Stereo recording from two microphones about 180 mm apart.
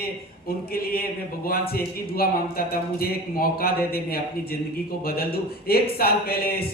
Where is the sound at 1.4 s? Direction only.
55° left (ahead or behind).